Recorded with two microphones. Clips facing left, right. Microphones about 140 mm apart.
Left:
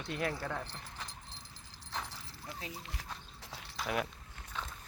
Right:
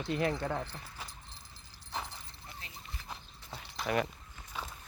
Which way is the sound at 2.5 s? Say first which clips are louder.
Left 6 dB; 90° left.